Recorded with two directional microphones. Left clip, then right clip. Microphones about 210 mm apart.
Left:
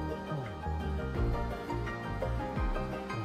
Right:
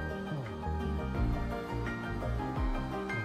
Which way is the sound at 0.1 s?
Centre (ahead or behind).